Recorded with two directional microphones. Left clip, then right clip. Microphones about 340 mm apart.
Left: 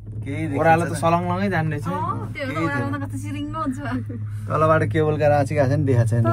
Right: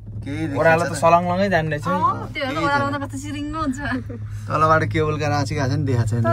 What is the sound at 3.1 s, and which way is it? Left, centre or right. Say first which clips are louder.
Speech: right 2 dB; centre.